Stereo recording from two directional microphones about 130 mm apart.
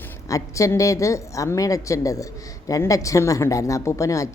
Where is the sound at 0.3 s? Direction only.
25° left (ahead or behind).